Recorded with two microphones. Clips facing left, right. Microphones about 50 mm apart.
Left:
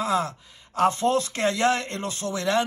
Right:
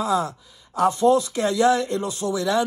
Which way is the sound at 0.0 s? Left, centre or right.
Left.